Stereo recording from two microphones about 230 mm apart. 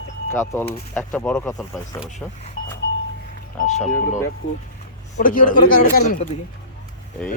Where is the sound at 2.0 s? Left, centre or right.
Left.